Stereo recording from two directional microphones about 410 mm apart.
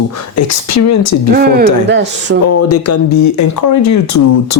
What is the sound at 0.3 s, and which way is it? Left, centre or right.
Speech, left.